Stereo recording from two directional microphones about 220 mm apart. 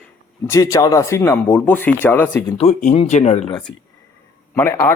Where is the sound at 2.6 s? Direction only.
30° left (ahead or behind).